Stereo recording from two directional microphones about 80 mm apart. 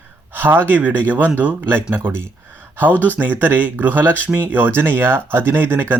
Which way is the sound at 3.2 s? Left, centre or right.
Right.